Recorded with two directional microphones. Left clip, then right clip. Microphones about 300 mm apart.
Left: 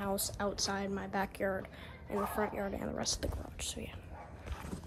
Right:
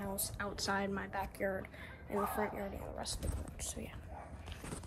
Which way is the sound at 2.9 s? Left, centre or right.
Left.